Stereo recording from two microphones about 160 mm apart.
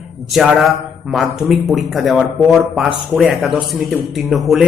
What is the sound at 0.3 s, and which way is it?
A man's voice, centre (ahead or behind).